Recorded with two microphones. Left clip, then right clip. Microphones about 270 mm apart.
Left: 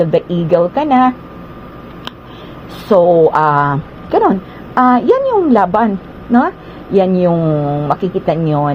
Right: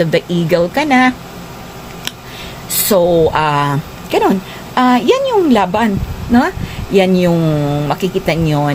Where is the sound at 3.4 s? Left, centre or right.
Right.